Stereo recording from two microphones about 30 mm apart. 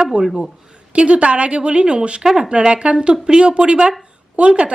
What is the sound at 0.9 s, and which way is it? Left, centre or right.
Speech, right.